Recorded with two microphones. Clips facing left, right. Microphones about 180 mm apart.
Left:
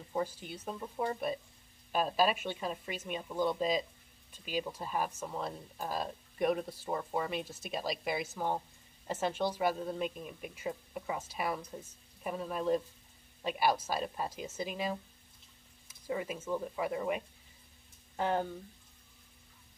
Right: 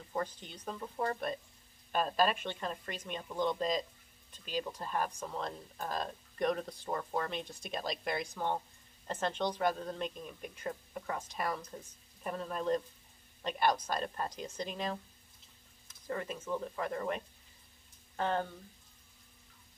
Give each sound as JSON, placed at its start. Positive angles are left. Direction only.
{"t": 0.1, "sound": "speech", "side_deg": 10}